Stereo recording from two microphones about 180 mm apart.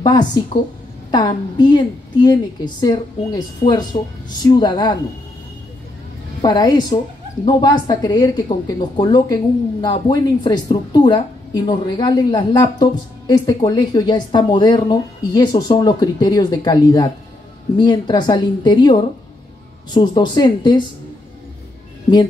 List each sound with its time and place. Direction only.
0.0 s a woman's voice: 25° left (ahead or behind)
6.4 s a woman's voice: 20° left (ahead or behind)